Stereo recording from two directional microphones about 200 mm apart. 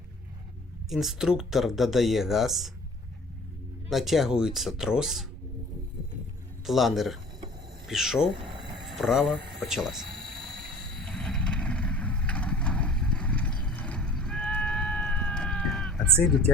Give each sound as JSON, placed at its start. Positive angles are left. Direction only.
{"t": 0.9, "sound": "speech", "side_deg": 0}
{"t": 3.8, "sound": "speech", "side_deg": 0}
{"t": 6.7, "sound": "speech", "side_deg": 0}
{"t": 8.4, "sound": "a sound", "side_deg": -25}
{"t": 8.9, "sound": "speech", "side_deg": 0}
{"t": 11.0, "sound": "vehicle", "side_deg": 0}